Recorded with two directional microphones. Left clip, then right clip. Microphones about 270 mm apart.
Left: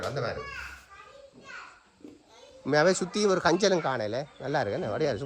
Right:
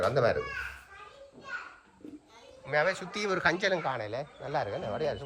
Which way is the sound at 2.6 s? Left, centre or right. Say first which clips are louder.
Left 5 dB; left.